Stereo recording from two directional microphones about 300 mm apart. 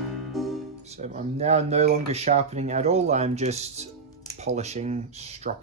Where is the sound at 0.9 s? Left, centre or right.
Right.